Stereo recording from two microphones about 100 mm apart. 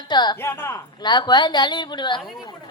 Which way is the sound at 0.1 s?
45° left (ahead or behind).